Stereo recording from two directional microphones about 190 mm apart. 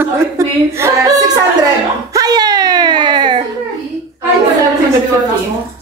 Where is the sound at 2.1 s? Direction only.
20° right (ahead or behind).